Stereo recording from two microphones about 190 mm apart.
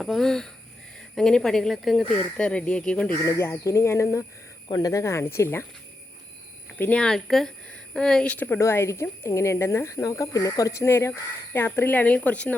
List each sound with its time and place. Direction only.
0.0 s a woman's voice: centre (ahead or behind)
6.7 s a woman's voice: 10° left (ahead or behind)